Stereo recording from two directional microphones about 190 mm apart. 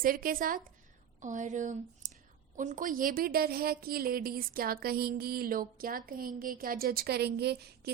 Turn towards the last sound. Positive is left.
turn(degrees=-60)  # may be behind; listen again after turning